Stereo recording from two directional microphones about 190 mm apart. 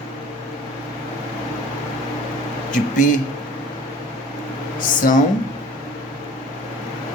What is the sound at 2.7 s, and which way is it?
Speech, 40° left (ahead or behind).